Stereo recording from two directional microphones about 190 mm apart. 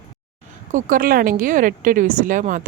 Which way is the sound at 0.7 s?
45° right (ahead or behind).